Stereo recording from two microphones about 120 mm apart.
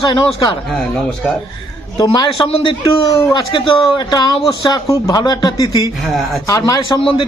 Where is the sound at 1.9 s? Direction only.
40° left (ahead or behind).